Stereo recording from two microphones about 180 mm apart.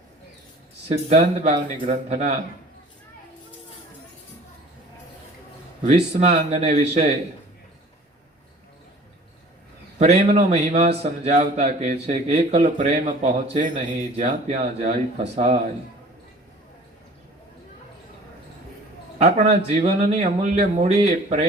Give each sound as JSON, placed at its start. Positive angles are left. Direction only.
{"t": 0.9, "sound": "a man's voice", "side_deg": -35}
{"t": 5.8, "sound": "a man's voice", "side_deg": -40}
{"t": 10.0, "sound": "a man's voice", "side_deg": -35}
{"t": 19.2, "sound": "a man's voice", "side_deg": -35}